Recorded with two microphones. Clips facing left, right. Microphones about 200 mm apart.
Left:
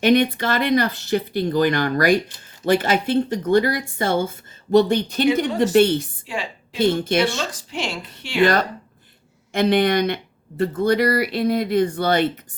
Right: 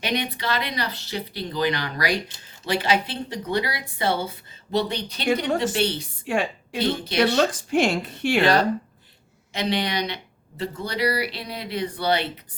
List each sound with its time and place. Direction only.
0.0 s speech: 50° left (ahead or behind)
6.2 s a woman's voice: 55° right (ahead or behind)
6.7 s speech: 50° left (ahead or behind)
7.3 s speech: 50° right (ahead or behind)
9.5 s speech: 50° left (ahead or behind)